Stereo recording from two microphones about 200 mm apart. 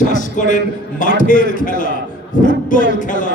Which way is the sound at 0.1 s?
40° left (ahead or behind).